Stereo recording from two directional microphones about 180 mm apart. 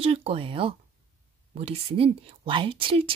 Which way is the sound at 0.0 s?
35° right (ahead or behind).